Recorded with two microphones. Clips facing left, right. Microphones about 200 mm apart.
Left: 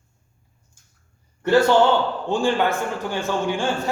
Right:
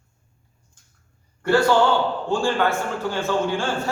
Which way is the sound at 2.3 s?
20° left (ahead or behind).